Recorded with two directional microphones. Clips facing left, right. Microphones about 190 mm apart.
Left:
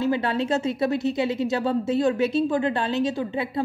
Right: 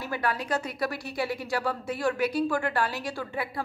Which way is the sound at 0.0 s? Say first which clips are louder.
Left 7 dB; 25° left (ahead or behind).